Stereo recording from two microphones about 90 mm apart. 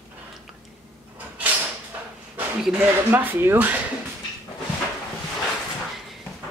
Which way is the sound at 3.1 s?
20° right (ahead or behind).